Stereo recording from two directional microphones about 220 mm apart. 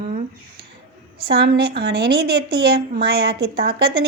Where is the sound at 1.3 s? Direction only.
50° right (ahead or behind).